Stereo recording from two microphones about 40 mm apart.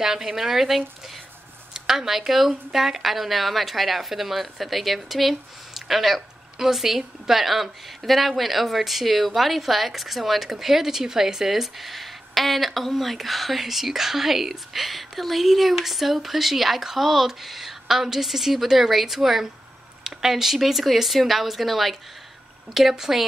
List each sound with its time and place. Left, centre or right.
0.0 s speech: centre